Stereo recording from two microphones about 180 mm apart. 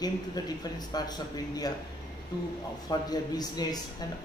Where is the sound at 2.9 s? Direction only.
20° left (ahead or behind).